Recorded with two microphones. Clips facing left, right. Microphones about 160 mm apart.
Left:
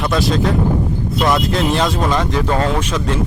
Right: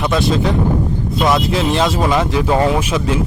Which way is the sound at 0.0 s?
Centre (ahead or behind).